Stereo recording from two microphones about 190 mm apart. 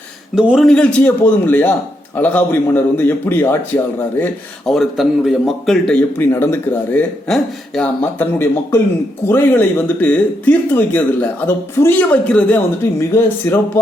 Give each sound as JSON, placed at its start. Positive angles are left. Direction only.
{"t": 0.3, "sound": "a man's voice", "side_deg": -5}
{"t": 4.2, "sound": "a man's voice", "side_deg": 0}